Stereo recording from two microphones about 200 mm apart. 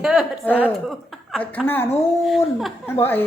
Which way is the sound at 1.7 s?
10° left (ahead or behind).